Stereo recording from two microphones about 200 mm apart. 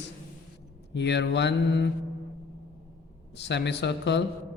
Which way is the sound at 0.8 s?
60° left (ahead or behind).